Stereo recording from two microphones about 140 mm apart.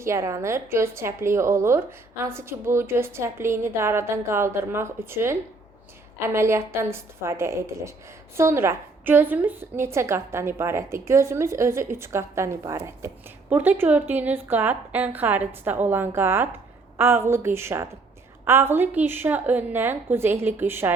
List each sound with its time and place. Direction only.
0.0 s a woman's voice: 20° right (ahead or behind)